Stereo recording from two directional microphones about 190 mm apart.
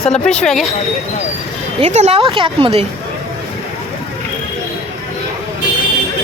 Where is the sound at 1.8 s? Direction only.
35° right (ahead or behind).